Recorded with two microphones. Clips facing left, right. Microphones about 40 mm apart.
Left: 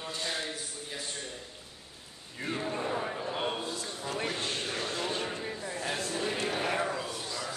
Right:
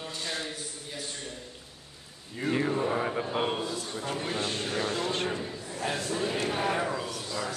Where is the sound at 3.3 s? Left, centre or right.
Centre.